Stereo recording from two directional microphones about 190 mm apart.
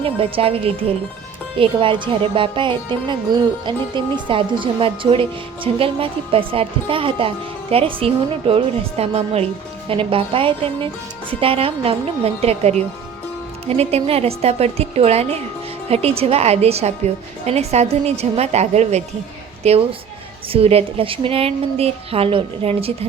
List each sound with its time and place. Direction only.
0.0 s a woman's voice: 30° right (ahead or behind)